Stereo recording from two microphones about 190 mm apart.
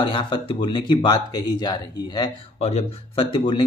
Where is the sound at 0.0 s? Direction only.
25° left (ahead or behind).